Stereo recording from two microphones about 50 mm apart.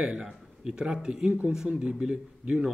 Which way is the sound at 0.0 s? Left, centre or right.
Centre.